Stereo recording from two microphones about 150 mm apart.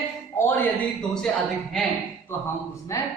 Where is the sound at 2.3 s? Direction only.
15° left (ahead or behind).